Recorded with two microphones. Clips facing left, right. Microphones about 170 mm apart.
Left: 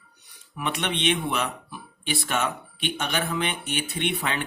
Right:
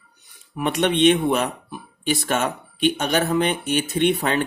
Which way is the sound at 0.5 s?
45° right (ahead or behind).